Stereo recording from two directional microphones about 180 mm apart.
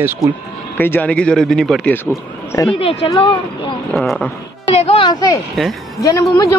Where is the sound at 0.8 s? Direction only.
10° left (ahead or behind).